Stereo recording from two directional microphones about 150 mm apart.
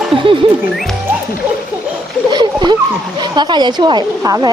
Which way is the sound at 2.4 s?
30° right (ahead or behind).